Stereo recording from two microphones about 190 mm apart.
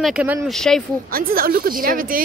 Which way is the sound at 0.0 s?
5° right (ahead or behind).